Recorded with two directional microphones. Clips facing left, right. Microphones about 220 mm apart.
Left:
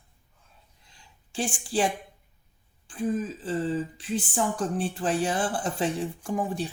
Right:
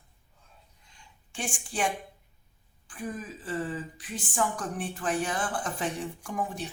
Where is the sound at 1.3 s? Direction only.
35° left (ahead or behind).